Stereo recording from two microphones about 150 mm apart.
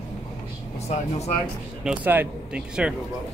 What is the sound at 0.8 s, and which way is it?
Speech, 45° left (ahead or behind).